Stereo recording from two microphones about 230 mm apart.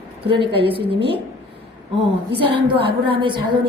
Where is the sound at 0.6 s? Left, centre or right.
Right.